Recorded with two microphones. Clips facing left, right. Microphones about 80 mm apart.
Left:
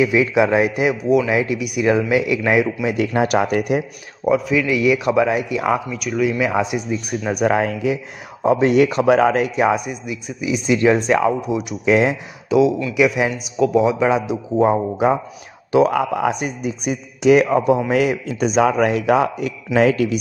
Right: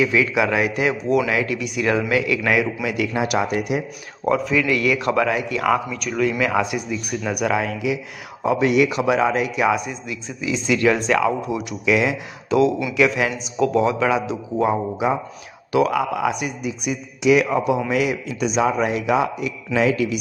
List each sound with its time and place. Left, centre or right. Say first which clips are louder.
0.0 s speech: left 3 dB; left
1.0 s a man's voice: left 4 dB; centre
1.3 s speech: left 3 dB; centre
3.2 s a man's voice: left 5 dB; left
4.3 s a man's voice: left 2 dB; centre
5.9 s a man's voice: left 2 dB; centre
6.4 s speech: left 1 dB; left
7.4 s speech: left 4 dB; left
9.8 s speech: left 2 dB; centre
11.8 s speech: left 3 dB; left
12.4 s a man's voice: left 2 dB; centre
14.6 s a man's voice: left 4 dB; left